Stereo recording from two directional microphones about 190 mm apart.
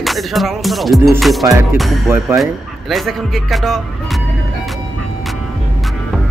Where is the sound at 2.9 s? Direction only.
Centre (ahead or behind).